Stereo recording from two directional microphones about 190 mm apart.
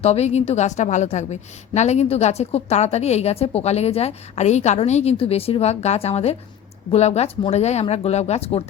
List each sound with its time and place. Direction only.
0.0 s a woman's voice: 35° left (ahead or behind)